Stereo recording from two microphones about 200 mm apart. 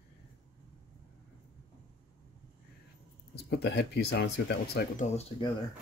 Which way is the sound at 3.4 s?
55° left (ahead or behind).